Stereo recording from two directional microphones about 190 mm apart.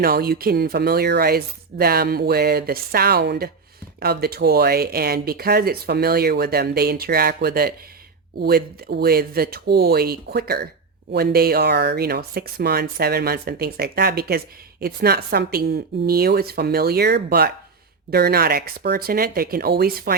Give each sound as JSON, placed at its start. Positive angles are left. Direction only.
{"t": 0.0, "sound": "speech", "side_deg": -55}